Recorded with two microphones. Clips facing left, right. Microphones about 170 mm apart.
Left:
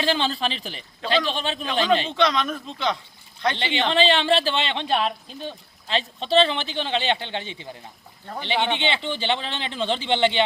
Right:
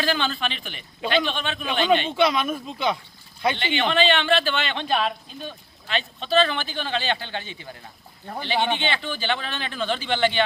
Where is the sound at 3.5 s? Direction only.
30° left (ahead or behind).